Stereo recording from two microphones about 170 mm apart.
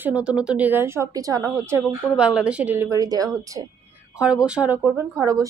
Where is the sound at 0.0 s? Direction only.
5° right (ahead or behind).